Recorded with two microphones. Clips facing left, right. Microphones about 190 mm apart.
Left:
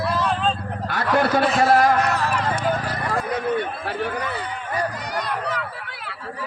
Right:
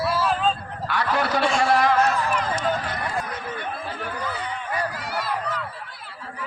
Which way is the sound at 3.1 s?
75° left (ahead or behind).